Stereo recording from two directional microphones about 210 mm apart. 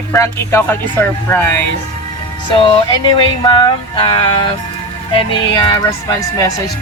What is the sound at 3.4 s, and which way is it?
Music, 25° left (ahead or behind).